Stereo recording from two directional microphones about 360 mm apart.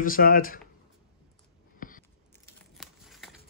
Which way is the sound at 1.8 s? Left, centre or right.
Left.